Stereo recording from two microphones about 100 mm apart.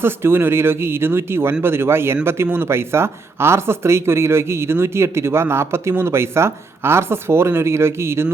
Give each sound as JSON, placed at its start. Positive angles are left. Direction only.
{"t": 0.0, "sound": "speech", "side_deg": -25}